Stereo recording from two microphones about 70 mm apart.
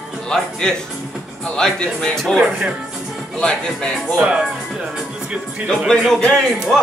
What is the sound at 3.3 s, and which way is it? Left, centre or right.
Speech, centre.